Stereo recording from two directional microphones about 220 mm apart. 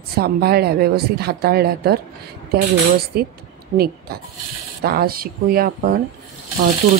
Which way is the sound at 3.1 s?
45° right (ahead or behind).